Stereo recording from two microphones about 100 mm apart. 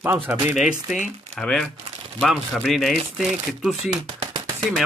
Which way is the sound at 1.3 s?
10° left (ahead or behind).